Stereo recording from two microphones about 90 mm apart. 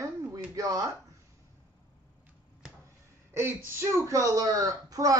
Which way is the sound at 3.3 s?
30° right (ahead or behind).